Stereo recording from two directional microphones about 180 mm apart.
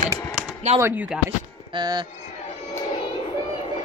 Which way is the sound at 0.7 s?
40° right (ahead or behind).